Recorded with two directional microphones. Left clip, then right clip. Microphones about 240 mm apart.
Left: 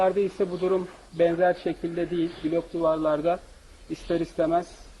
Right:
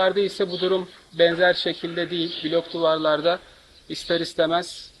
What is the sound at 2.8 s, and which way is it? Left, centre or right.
Speech, right.